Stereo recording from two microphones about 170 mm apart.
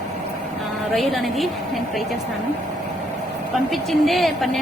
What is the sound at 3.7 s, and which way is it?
Speech, centre (ahead or behind).